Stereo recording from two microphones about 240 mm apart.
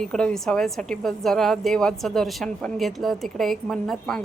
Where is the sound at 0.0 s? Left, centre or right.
Centre.